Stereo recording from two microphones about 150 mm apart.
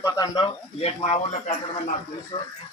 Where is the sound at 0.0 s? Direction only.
25° left (ahead or behind).